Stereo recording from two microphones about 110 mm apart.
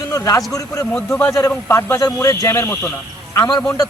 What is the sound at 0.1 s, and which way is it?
A man's voice, 30° left (ahead or behind).